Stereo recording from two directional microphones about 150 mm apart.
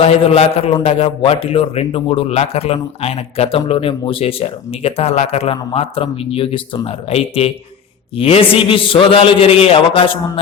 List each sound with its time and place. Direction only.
0.0 s a man's voice: 40° left (ahead or behind)